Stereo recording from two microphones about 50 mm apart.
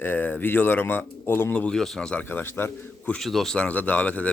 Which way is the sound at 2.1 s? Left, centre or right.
Left.